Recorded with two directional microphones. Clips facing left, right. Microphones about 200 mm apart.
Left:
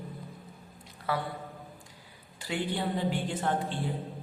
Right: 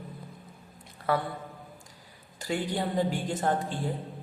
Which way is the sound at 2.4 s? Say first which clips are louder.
Right 2 dB; 45° right (ahead or behind).